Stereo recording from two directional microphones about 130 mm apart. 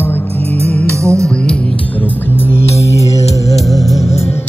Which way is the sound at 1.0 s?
20° right (ahead or behind).